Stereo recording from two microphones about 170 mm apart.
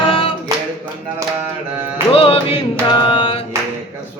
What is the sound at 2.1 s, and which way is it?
Music, 35° left (ahead or behind).